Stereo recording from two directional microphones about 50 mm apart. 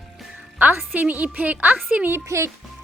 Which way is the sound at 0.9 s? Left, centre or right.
Right.